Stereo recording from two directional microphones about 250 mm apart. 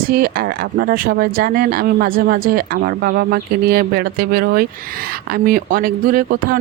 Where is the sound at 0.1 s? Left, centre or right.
Right.